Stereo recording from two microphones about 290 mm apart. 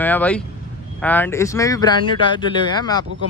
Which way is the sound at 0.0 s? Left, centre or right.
Centre.